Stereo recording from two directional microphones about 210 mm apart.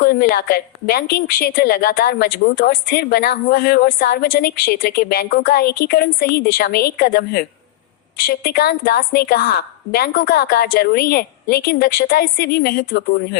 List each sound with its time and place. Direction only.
0.0 s a woman's voice: 45° left (ahead or behind)